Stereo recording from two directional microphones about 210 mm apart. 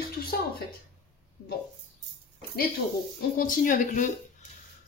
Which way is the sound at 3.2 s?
45° left (ahead or behind).